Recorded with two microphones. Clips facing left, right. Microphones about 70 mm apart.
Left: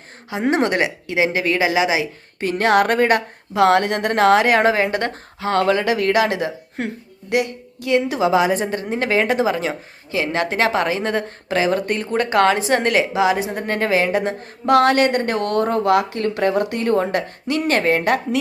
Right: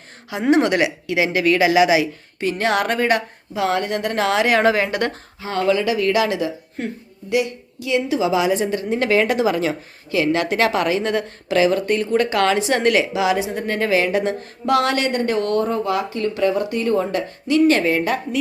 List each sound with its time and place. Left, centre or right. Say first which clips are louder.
0.4 s a woman's voice: right 2 dB; left
2.4 s a woman's voice: left 3 dB; left
3.5 s a woman's voice: left 5 dB; left
5.4 s a woman's voice: left 2 dB; left
6.7 s a woman's voice: left 1 dB; left
14.7 s a woman's voice: left 4 dB; left